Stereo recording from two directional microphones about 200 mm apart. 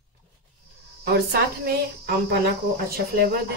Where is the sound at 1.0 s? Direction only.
55° right (ahead or behind).